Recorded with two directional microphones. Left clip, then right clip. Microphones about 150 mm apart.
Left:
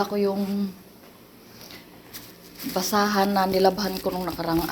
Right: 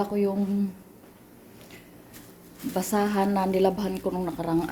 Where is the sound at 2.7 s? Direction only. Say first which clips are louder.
Left 4 dB; 25° right (ahead or behind).